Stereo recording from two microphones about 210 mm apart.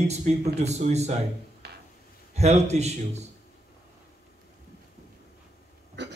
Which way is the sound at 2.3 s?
30° right (ahead or behind).